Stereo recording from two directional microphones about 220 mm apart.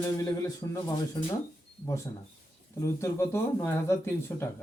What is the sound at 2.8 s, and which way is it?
A man's voice, 10° left (ahead or behind).